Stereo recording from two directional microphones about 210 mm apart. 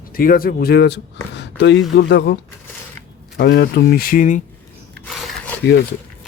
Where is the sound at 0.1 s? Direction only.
45° left (ahead or behind).